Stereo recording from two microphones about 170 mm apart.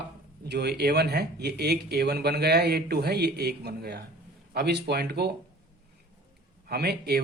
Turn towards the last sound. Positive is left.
turn(degrees=-70)  # may be behind; listen again after turning